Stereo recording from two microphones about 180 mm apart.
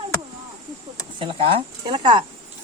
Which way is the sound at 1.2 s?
30° right (ahead or behind).